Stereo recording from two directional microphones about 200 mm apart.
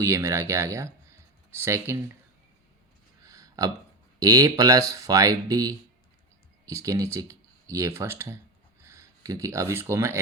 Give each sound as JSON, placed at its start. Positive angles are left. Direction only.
{"t": 0.0, "sound": "speech", "side_deg": -15}
{"t": 3.2, "sound": "a sound", "side_deg": -15}
{"t": 4.2, "sound": "speech", "side_deg": -15}